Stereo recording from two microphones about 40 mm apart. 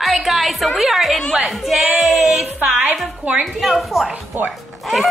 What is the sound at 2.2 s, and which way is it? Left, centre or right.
Music, centre.